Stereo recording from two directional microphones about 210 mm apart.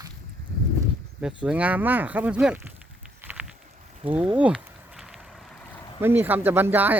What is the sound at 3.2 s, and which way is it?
Walk, 5° right (ahead or behind).